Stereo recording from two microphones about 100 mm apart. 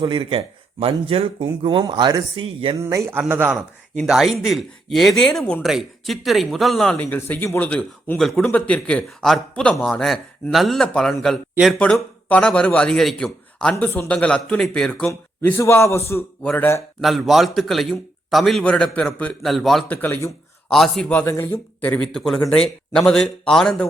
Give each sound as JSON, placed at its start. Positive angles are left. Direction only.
{"t": 0.0, "sound": "speech", "side_deg": -55}
{"t": 2.7, "sound": "a man's voice", "side_deg": -30}
{"t": 4.0, "sound": "a man's voice", "side_deg": -5}
{"t": 6.9, "sound": "speech", "side_deg": 20}
{"t": 8.2, "sound": "a man's voice", "side_deg": 5}
{"t": 15.5, "sound": "speech", "side_deg": 25}
{"t": 16.4, "sound": "a man's voice", "side_deg": 15}
{"t": 17.0, "sound": "a man's voice", "side_deg": 0}
{"t": 19.9, "sound": "speech", "side_deg": 20}
{"t": 20.7, "sound": "a man's voice", "side_deg": 0}
{"t": 21.2, "sound": "a man's voice", "side_deg": 25}